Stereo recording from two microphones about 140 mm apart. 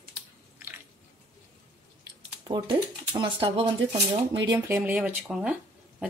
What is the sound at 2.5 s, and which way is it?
Speech, 35° right (ahead or behind).